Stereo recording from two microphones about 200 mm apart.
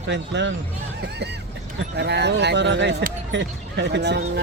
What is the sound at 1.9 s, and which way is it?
Speech, 60° right (ahead or behind).